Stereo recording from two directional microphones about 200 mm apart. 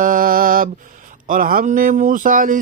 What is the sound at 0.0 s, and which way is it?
Mantra, 45° right (ahead or behind).